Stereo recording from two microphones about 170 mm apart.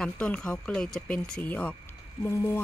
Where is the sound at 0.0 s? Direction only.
5° left (ahead or behind).